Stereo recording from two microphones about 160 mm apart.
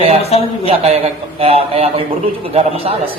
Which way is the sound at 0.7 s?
40° right (ahead or behind).